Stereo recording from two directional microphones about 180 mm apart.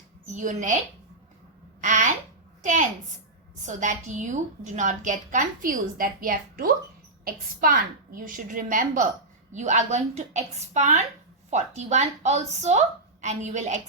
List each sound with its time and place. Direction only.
0.3 s a woman's voice: 45° right (ahead or behind)
1.8 s a sound: 45° right (ahead or behind)
2.6 s a woman's voice: 45° right (ahead or behind)